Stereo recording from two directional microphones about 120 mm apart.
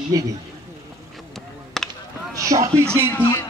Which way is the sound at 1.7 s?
5° left (ahead or behind).